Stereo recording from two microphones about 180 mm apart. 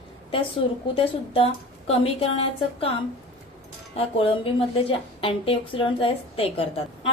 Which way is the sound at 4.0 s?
30° left (ahead or behind).